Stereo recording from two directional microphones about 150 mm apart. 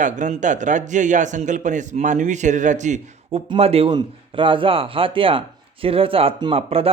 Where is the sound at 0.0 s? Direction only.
55° right (ahead or behind).